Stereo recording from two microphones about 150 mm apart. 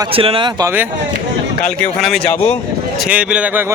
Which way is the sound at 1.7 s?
Centre (ahead or behind).